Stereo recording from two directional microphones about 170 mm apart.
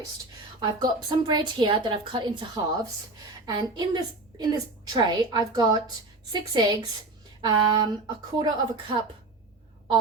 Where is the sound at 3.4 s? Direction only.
25° right (ahead or behind).